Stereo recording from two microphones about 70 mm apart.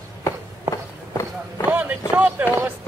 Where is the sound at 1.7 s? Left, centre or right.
Right.